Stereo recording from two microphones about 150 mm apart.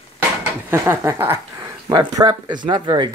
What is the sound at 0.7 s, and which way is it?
Speech, 15° right (ahead or behind).